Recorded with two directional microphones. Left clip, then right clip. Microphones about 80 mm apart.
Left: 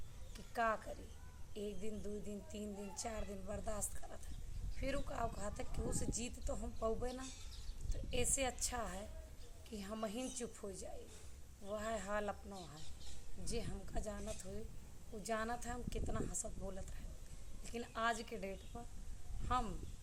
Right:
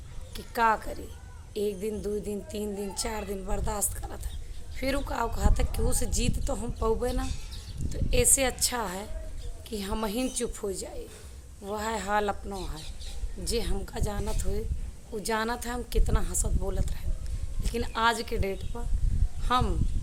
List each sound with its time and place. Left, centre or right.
0.3 s a woman's voice: right
13.4 s a woman's voice: right